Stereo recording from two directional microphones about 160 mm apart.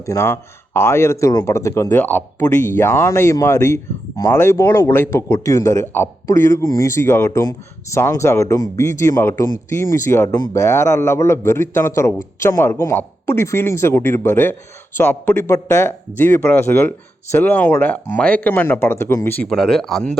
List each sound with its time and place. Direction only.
0.0 s a man's voice: 20° left (ahead or behind); by 20.1 s 5° left (ahead or behind)